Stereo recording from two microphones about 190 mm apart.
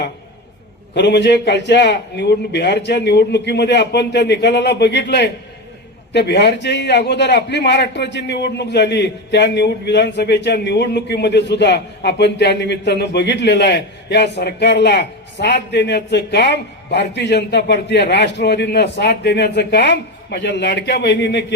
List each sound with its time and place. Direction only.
0.9 s a man's voice: 65° left (ahead or behind)